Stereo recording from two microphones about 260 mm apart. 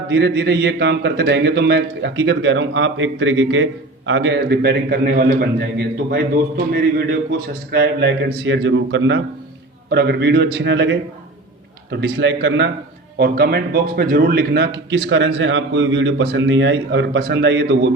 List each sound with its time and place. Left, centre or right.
0.1 s a man's voice: right